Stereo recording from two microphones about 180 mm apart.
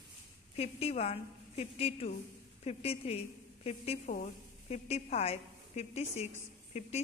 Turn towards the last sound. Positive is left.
turn(degrees=35)  # may be behind; listen again after turning